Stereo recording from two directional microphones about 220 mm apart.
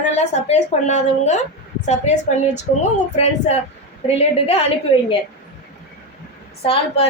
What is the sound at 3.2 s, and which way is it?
A woman's voice, 30° left (ahead or behind).